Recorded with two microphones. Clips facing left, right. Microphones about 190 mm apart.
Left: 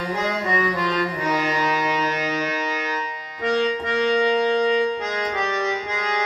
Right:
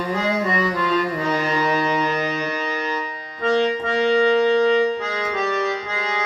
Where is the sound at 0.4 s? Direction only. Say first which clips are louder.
Right 1 dB; 15° left (ahead or behind).